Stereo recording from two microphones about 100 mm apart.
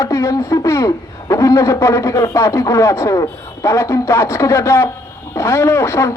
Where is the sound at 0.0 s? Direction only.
30° left (ahead or behind).